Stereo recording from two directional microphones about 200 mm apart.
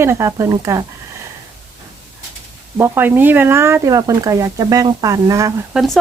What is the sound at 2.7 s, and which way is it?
Speech, 10° right (ahead or behind).